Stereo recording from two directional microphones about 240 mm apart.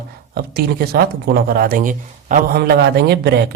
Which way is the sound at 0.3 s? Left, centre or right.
Right.